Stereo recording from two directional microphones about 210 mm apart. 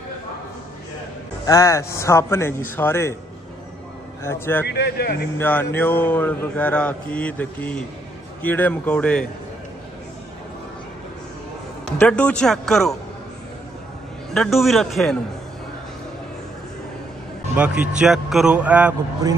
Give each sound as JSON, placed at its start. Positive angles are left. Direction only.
{"t": 1.4, "sound": "mantra", "side_deg": 15}
{"t": 4.2, "sound": "mantra", "side_deg": 10}
{"t": 4.6, "sound": "speech", "side_deg": 50}
{"t": 5.4, "sound": "mantra", "side_deg": 10}
{"t": 12.0, "sound": "a man's voice", "side_deg": 5}
{"t": 14.3, "sound": "a man's voice", "side_deg": 0}
{"t": 17.6, "sound": "a man's voice", "side_deg": -5}